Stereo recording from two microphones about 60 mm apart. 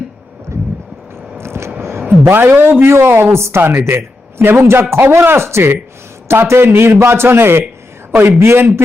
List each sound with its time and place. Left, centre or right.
0.5 s vehicle: right
1.8 s a man's voice: right